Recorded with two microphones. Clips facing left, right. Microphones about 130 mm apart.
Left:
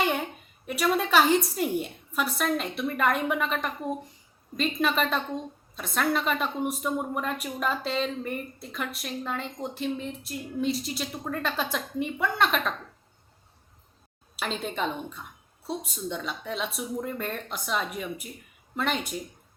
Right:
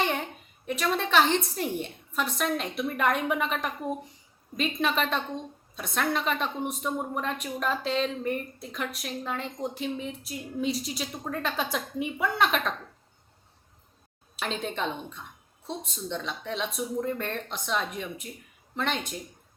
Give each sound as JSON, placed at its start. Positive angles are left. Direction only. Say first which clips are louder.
{"t": 0.0, "sound": "a sound", "louder": "left 2 dB", "side_deg": 5}
{"t": 1.5, "sound": "a woman's voice", "louder": "left 3 dB", "side_deg": 5}
{"t": 14.3, "sound": "a woman's voice", "louder": "left 1 dB", "side_deg": 0}